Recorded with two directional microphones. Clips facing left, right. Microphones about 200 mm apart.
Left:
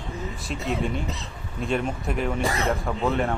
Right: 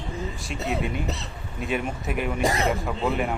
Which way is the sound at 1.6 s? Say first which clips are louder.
Left 2 dB; 5° right (ahead or behind).